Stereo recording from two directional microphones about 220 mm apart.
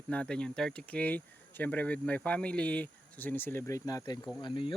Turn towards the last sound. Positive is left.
turn(degrees=20)  # may be behind; listen again after turning